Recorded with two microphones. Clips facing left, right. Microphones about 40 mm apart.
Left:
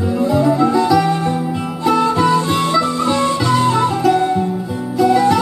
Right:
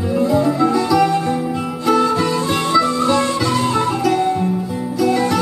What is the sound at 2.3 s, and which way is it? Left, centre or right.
Music, left.